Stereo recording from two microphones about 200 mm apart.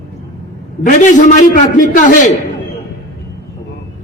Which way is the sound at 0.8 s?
35° left (ahead or behind).